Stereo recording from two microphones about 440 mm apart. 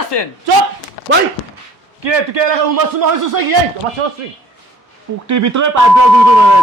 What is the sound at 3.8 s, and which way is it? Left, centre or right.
Speech, right.